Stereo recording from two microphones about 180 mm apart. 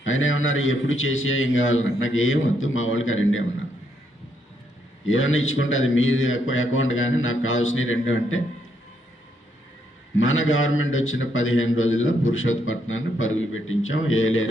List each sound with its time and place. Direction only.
0.0 s a man's voice: 90° left
5.0 s a man's voice: 90° left
10.2 s a man's voice: 90° left